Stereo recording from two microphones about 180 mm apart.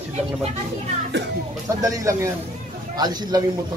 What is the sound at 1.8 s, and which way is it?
A man's voice, 15° right (ahead or behind).